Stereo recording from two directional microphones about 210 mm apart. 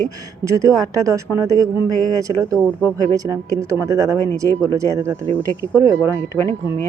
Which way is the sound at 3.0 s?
15° right (ahead or behind).